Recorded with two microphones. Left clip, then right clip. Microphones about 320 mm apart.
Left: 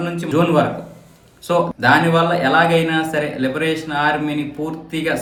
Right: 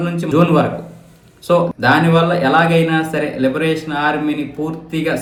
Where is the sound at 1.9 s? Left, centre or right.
Left.